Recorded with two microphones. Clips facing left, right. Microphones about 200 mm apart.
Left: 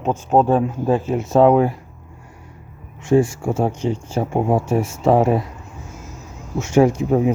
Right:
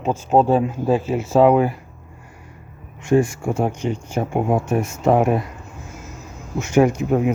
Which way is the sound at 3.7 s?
25° left (ahead or behind).